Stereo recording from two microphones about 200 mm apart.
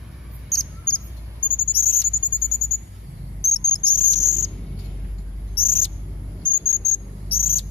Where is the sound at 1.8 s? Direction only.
25° left (ahead or behind).